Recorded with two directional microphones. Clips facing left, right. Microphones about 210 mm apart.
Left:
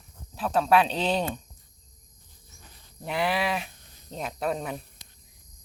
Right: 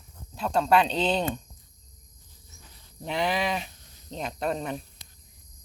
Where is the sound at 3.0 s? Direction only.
5° left (ahead or behind).